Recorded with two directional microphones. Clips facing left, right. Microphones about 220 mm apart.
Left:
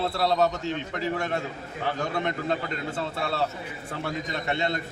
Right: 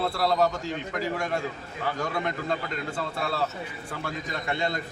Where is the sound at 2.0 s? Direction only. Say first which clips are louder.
Left 1 dB; 25° left (ahead or behind).